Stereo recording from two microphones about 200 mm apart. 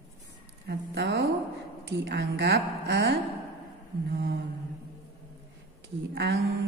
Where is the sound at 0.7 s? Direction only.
55° right (ahead or behind).